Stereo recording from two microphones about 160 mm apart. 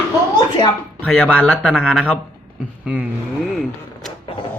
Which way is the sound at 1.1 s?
10° left (ahead or behind).